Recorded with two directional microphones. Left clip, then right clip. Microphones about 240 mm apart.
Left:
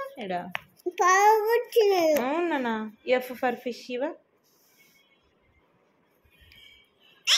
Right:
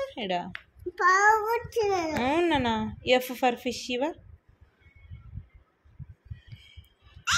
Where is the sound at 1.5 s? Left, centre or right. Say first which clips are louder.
Left 5 dB; centre.